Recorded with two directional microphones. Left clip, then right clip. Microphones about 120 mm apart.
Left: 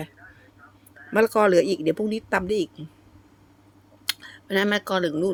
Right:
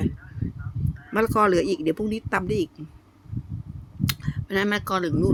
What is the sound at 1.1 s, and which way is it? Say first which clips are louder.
Speech: left 2 dB; 20° left (ahead or behind).